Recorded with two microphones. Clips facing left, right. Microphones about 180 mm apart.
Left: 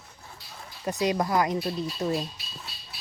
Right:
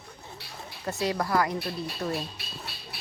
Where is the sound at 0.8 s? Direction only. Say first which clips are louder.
Left 3 dB; 20° left (ahead or behind).